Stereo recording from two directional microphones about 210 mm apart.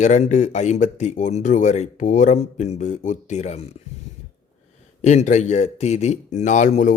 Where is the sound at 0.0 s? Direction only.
35° left (ahead or behind).